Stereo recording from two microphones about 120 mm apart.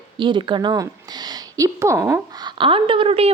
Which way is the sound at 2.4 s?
45° right (ahead or behind).